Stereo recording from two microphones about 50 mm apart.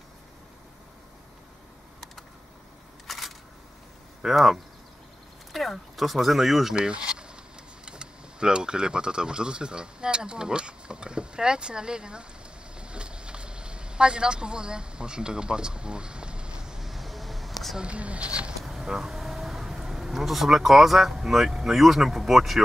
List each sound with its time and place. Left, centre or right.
3.1 s single-lens reflex camera: centre
4.2 s speech: centre
6.7 s speech: centre
12.7 s vehicle: centre
17.7 s speech: right
18.7 s speech: centre